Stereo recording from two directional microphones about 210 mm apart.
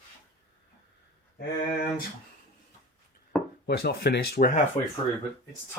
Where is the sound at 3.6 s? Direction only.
50° left (ahead or behind).